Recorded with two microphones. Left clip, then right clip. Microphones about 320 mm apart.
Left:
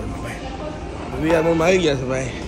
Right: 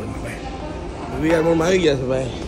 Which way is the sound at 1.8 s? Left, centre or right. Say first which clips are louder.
Right 2 dB; centre.